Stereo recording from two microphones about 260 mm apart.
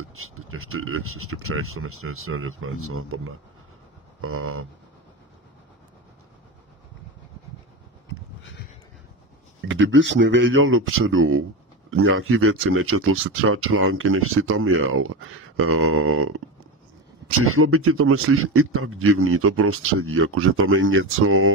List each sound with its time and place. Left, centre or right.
0.1 s a man's voice: right
9.7 s a man's voice: right